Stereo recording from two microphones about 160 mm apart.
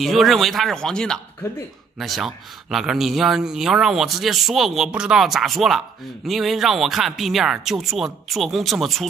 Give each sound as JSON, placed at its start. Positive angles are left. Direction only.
{"t": 0.0, "sound": "speech", "side_deg": 0}